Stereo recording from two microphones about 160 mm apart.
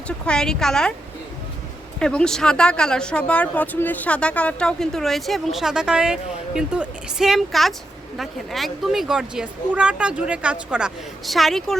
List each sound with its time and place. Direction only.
0.3 s a woman's voice: 5° left (ahead or behind)
2.0 s a woman's voice: 5° left (ahead or behind)